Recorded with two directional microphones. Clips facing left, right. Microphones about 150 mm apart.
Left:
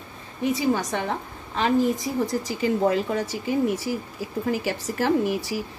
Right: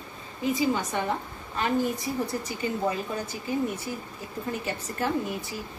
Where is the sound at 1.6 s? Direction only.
90° left.